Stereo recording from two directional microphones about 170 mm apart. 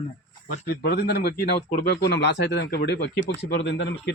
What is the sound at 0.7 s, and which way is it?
A man's voice, 70° left (ahead or behind).